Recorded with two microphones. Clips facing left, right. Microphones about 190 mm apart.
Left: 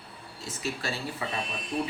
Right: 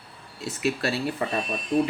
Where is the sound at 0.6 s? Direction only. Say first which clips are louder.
Right 8 dB; 70° right (ahead or behind).